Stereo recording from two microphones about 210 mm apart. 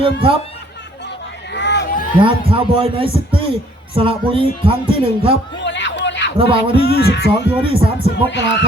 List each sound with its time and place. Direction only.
0.0 s speech: 25° right (ahead or behind)
1.5 s a sound: 55° left (ahead or behind)
2.2 s speech: 25° right (ahead or behind)
5.6 s music: 60° left (ahead or behind)
6.3 s speech: 25° right (ahead or behind)
6.8 s a sound: 50° left (ahead or behind)
7.6 s speech: 25° right (ahead or behind)
8.1 s music: 55° left (ahead or behind)